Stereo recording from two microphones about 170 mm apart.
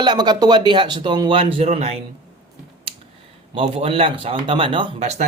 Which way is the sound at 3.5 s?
35° right (ahead or behind).